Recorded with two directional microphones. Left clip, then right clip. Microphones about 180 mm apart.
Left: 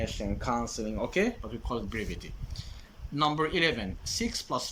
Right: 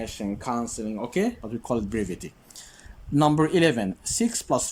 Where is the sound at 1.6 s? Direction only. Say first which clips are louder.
Right 7 dB; 30° right (ahead or behind).